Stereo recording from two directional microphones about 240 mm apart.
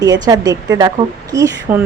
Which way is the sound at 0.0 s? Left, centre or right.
Centre.